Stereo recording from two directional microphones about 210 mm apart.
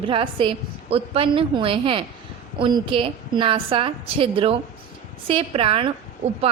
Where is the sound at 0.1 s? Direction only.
25° right (ahead or behind).